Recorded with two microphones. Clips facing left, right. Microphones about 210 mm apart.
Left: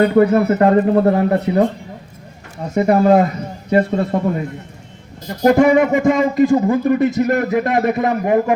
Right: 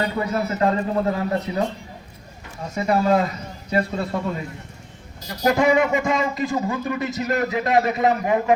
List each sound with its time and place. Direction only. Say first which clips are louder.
0.0 s speech: left 11 dB; 60° left (ahead or behind)
2.7 s speech: left 7 dB; 55° left (ahead or behind)